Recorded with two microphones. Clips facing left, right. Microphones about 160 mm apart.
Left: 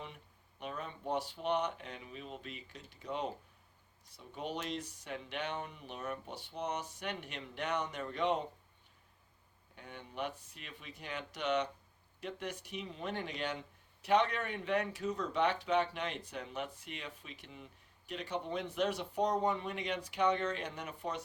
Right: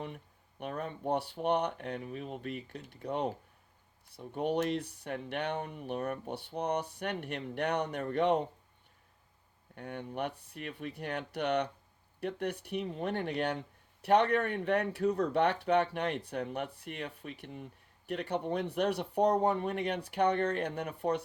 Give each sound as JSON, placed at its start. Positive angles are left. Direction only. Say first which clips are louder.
{"t": 0.6, "sound": "speech", "louder": "right 5 dB", "side_deg": -55}
{"t": 9.7, "sound": "speech", "louder": "right 6 dB", "side_deg": -55}